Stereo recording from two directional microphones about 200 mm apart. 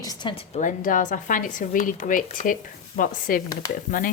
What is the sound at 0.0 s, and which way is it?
A woman's voice, 20° left (ahead or behind).